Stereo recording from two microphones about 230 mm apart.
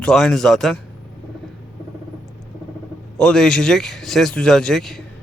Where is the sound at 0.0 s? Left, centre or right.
Centre.